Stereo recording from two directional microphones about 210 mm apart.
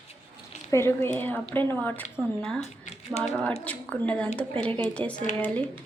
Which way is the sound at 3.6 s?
5° left (ahead or behind).